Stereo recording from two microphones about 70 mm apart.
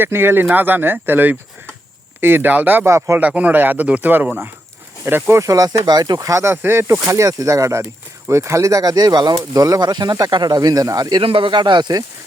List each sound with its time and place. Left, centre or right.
0.0 s speech: right
2.8 s speech: right
3.2 s speech: right
5.1 s speech: right
5.4 s speech: right
7.1 s speech: right
10.2 s speech: right